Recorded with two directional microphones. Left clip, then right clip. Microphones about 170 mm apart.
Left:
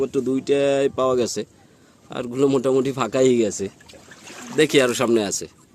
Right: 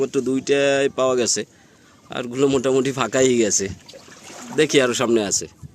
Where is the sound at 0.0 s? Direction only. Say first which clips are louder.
Right 1 dB; centre (ahead or behind).